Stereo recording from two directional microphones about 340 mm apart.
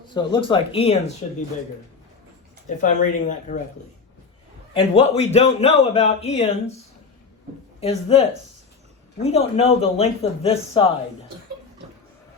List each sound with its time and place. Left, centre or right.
0.1 s a man's voice: centre
2.6 s a man's voice: left
4.7 s a man's voice: centre
7.8 s a man's voice: centre